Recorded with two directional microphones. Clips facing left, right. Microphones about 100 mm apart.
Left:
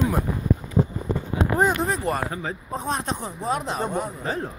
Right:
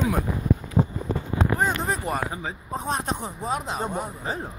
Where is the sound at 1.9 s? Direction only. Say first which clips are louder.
Left 2 dB; 5° right (ahead or behind).